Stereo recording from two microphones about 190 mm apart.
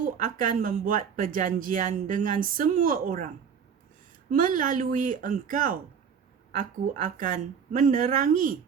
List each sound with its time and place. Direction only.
0.2 s speech: 45° right (ahead or behind)
4.3 s speech: 45° right (ahead or behind)
7.0 s a woman's voice: 40° right (ahead or behind)